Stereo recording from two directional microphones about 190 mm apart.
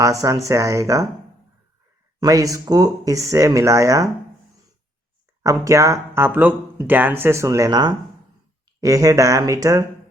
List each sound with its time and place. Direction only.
0.0 s speech: 15° right (ahead or behind)
2.2 s speech: 20° right (ahead or behind)
5.4 s speech: 15° right (ahead or behind)